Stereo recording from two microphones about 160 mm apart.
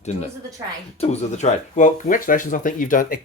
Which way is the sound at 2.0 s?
60° left (ahead or behind).